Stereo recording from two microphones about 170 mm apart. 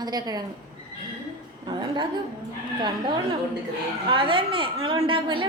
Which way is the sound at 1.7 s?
25° right (ahead or behind).